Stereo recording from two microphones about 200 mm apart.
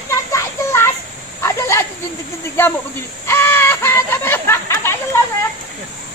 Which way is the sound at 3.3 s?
10° left (ahead or behind).